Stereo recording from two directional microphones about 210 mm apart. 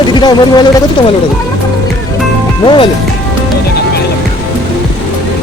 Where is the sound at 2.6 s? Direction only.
25° left (ahead or behind).